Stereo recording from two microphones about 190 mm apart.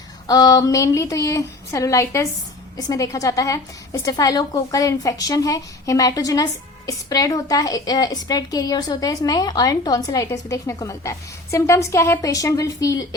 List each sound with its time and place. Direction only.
0.3 s a woman's voice: 20° left (ahead or behind)